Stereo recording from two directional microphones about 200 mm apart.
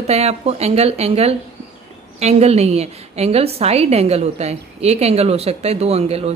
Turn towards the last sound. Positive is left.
turn(degrees=-30)  # may be behind; listen again after turning